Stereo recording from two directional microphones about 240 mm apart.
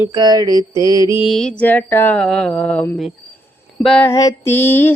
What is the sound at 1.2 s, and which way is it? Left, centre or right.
Mantra, centre.